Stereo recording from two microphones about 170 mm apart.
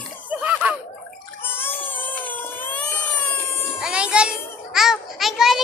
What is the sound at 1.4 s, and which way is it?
Water, 15° left (ahead or behind).